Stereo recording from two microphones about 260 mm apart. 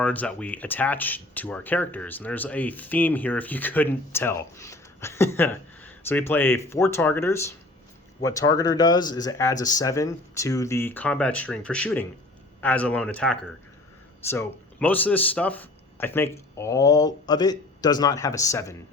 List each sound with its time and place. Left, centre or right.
0.0 s speech: centre